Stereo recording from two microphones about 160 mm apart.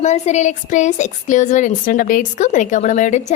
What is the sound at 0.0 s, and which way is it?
A woman's voice, 45° left (ahead or behind).